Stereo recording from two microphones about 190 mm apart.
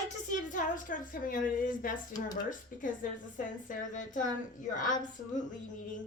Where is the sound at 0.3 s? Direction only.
45° left (ahead or behind).